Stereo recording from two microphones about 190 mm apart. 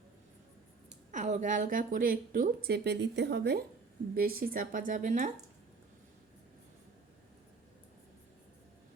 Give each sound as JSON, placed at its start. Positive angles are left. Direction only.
{"t": 1.1, "sound": "a woman's voice", "side_deg": -40}
{"t": 4.4, "sound": "a woman's voice", "side_deg": -50}